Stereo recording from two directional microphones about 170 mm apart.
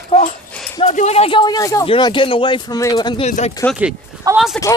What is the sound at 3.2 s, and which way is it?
Speech, 40° left (ahead or behind).